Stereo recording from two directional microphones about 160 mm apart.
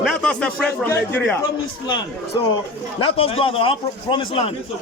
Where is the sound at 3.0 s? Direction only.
35° left (ahead or behind).